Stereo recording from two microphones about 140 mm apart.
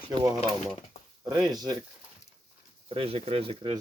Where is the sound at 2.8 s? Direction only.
40° right (ahead or behind).